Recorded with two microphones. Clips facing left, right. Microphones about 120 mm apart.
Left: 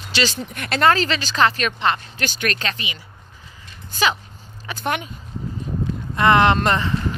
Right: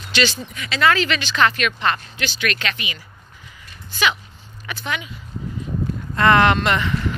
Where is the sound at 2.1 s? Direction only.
45° left (ahead or behind).